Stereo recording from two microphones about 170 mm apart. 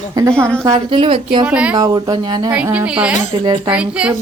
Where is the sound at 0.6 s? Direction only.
30° right (ahead or behind).